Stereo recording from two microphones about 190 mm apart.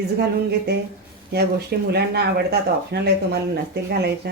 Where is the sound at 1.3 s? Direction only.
55° right (ahead or behind).